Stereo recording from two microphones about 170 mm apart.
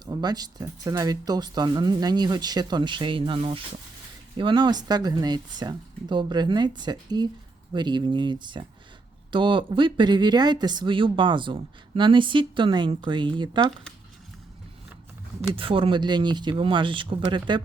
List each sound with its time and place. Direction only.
0.0 s speech: 25° right (ahead or behind)
15.5 s speech: 30° right (ahead or behind)